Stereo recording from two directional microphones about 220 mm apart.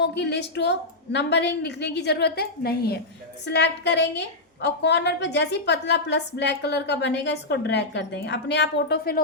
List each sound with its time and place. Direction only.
0.0 s a woman's voice: 50° left (ahead or behind)